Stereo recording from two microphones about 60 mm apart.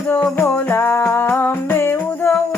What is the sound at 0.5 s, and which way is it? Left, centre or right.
Music, left.